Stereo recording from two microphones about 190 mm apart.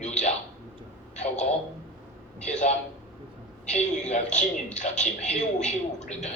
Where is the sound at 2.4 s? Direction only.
40° left (ahead or behind).